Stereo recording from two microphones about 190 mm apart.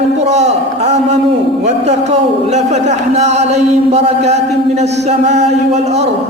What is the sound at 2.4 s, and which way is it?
A man's voice, 35° right (ahead or behind).